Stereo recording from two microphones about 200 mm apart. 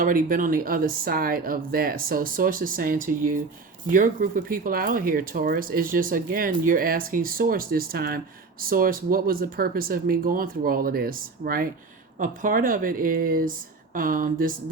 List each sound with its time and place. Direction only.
0.0 s speech: 45° right (ahead or behind)